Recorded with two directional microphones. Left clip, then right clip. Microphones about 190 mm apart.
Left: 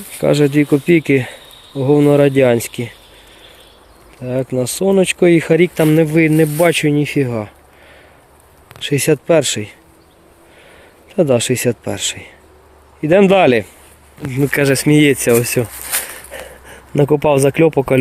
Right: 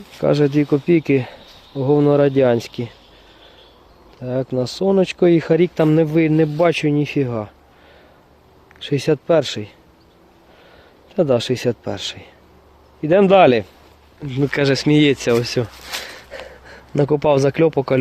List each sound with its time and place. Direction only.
0.2 s speech: 5° right (ahead or behind)
4.2 s speech: centre (ahead or behind)
8.9 s speech: centre (ahead or behind)
11.1 s speech: centre (ahead or behind)